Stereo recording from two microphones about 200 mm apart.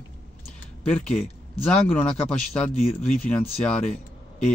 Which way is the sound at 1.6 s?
5° left (ahead or behind).